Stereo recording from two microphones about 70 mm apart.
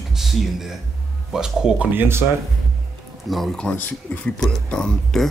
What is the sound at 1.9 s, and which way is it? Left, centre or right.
Speech, right.